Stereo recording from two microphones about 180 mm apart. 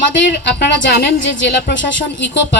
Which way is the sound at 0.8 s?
65° left (ahead or behind).